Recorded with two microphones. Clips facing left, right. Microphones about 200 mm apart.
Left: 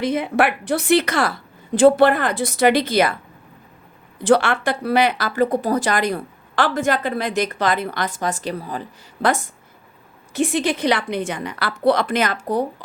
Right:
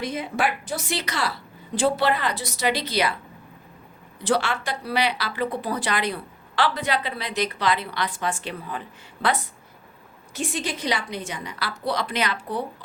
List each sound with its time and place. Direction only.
0.0 s speech: 65° left (ahead or behind)
4.2 s speech: 55° left (ahead or behind)
10.3 s a woman's voice: 60° left (ahead or behind); by 12.6 s 45° left (ahead or behind)